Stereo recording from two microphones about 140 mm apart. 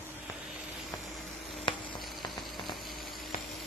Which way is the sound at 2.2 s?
Centre (ahead or behind).